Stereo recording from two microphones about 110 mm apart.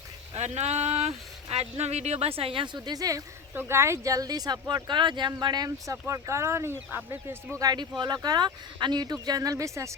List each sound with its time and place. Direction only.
0.3 s speech: 90° right; by 2.6 s 55° right (ahead or behind)
2.7 s speech: 35° right (ahead or behind)
3.5 s speech: 20° right (ahead or behind)
7.6 s speech: 40° right (ahead or behind)